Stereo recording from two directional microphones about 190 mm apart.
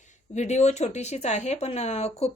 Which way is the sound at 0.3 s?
35° left (ahead or behind).